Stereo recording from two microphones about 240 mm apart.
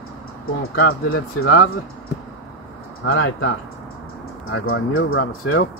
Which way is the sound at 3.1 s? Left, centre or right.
Left.